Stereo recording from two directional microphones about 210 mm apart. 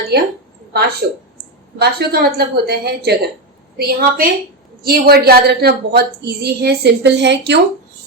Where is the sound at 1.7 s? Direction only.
50° right (ahead or behind).